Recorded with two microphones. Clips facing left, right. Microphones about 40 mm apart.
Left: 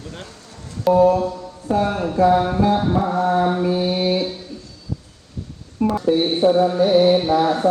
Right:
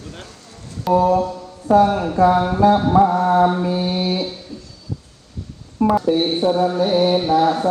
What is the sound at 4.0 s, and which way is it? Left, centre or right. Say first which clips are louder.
Speech: left 2 dB; left.